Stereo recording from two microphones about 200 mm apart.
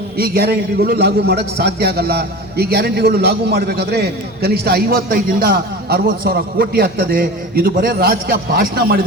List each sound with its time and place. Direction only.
0.2 s a man's voice: 50° right (ahead or behind)